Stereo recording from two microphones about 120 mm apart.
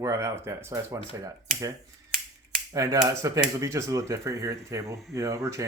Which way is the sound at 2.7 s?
25° right (ahead or behind).